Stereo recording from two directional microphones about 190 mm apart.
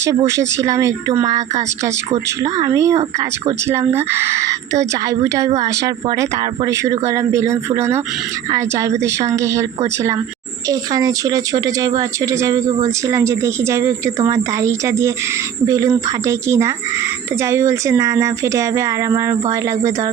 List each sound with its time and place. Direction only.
0.3 s speech: 15° right (ahead or behind)